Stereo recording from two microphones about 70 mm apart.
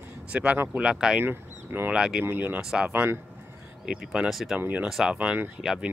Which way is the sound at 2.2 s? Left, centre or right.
Right.